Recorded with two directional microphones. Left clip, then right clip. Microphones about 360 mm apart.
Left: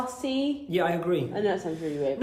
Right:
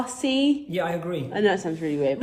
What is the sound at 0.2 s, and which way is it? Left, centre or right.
Speech, right.